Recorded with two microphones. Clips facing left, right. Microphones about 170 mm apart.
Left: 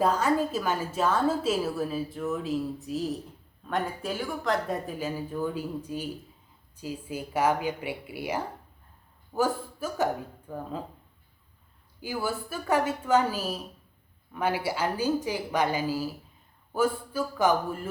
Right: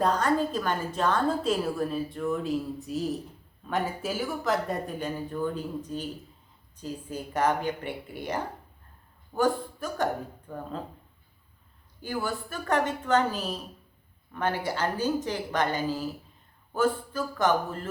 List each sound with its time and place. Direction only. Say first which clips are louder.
0.0 s a woman's voice: even; 5° left (ahead or behind)
12.0 s speech: even; 10° left (ahead or behind)